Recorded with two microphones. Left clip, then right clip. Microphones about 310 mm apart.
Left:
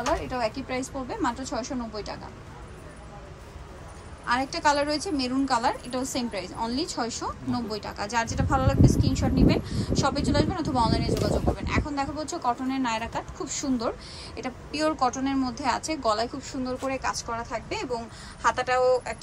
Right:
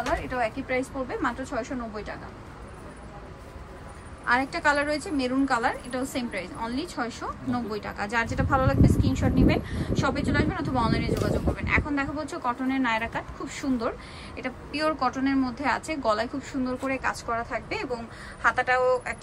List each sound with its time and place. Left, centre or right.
0.4 s speech: centre
4.3 s speech: centre
11.1 s speech: centre